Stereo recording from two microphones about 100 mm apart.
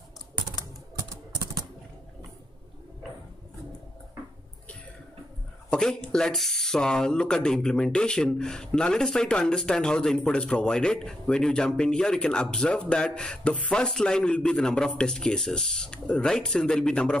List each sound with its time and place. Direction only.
0.9 s typing: 35° right (ahead or behind)
5.7 s speech: 5° left (ahead or behind)